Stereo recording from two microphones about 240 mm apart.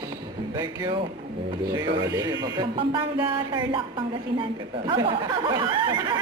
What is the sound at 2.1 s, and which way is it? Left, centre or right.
Speech, centre.